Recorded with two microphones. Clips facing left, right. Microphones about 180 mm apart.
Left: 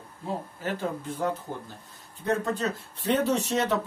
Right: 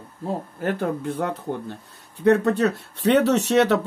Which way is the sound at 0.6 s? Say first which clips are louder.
Right 8 dB; 60° right (ahead or behind).